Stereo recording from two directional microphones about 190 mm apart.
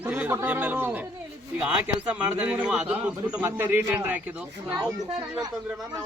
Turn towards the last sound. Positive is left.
turn(degrees=-20)  # may be behind; listen again after turning